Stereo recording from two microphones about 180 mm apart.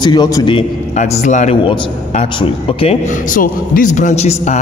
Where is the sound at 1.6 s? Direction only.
25° left (ahead or behind).